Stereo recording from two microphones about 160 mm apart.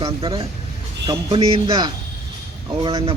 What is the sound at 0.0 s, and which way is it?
A man's voice, 35° right (ahead or behind).